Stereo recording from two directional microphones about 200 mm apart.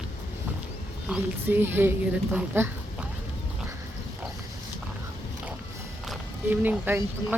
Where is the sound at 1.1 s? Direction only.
10° right (ahead or behind).